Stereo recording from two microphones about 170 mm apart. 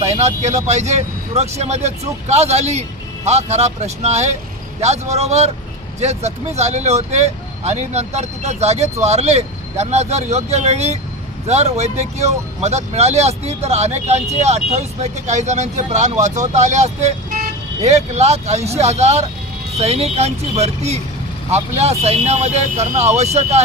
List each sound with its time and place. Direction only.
0.2 s speech: 40° right (ahead or behind)